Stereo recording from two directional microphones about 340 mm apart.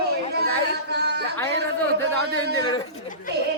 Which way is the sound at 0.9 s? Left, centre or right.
Right.